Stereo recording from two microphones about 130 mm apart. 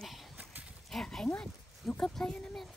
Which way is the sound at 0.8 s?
5° left (ahead or behind).